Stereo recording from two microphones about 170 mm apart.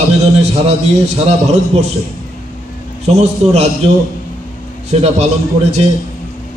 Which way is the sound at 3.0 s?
40° right (ahead or behind).